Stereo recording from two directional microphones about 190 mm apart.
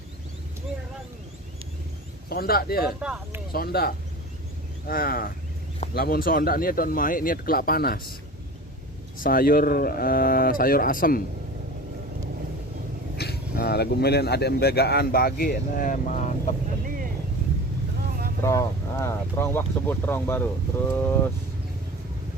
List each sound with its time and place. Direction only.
2.3 s speech: 50° left (ahead or behind)
3.0 s speech: 5° right (ahead or behind)
3.5 s speech: 55° left (ahead or behind)
9.2 s speech: 50° left (ahead or behind)
13.1 s speech: 55° left (ahead or behind)
16.8 s a sound: 45° right (ahead or behind)
18.4 s speech: 15° left (ahead or behind)